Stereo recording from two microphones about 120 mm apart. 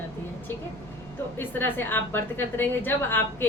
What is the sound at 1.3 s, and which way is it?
A woman's voice, 15° left (ahead or behind).